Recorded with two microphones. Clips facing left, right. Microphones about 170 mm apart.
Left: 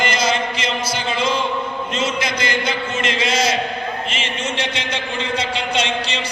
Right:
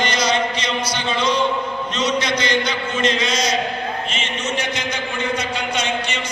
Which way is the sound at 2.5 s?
5° left (ahead or behind).